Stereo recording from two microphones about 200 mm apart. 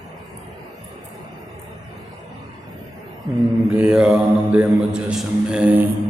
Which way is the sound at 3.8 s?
5° right (ahead or behind).